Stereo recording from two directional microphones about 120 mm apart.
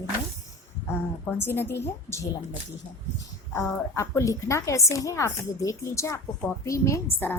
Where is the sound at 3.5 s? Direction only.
25° left (ahead or behind).